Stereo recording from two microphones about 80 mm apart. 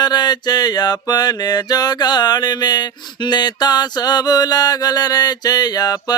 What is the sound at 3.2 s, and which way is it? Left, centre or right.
Mantra, left.